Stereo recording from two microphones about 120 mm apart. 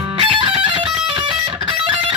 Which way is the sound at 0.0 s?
40° right (ahead or behind).